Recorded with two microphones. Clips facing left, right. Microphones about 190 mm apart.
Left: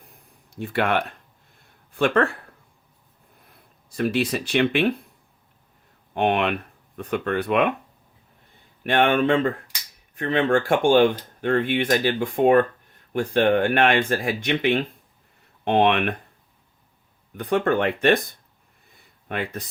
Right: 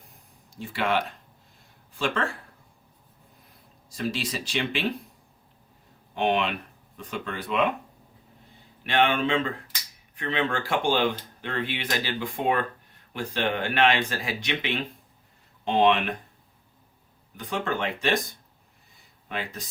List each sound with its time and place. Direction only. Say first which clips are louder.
0.6 s speech: left 4 dB; 55° left (ahead or behind)
3.8 s speech: left 7 dB; 60° left (ahead or behind)
6.1 s speech: left 3 dB; 55° left (ahead or behind)
8.8 s speech: left 4 dB; 50° left (ahead or behind)
17.3 s speech: left 8 dB; 60° left (ahead or behind)